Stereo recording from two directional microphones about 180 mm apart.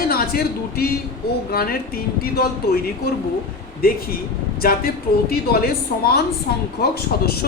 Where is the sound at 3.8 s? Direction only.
55° left (ahead or behind).